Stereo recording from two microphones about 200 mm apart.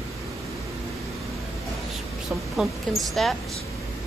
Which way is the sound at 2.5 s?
Centre (ahead or behind).